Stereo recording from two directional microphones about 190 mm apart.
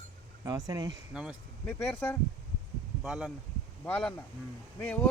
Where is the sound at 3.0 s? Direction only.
5° right (ahead or behind).